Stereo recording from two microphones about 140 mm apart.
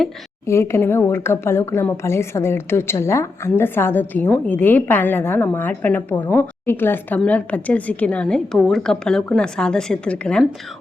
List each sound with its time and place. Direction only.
0.4 s a woman's voice: 20° left (ahead or behind)